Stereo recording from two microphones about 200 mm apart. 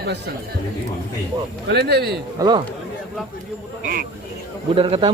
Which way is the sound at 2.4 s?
20° right (ahead or behind).